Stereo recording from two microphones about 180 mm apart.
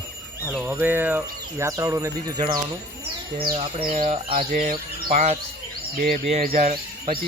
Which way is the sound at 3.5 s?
40° right (ahead or behind).